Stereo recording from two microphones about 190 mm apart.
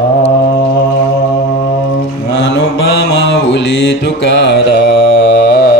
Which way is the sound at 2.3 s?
65° left (ahead or behind).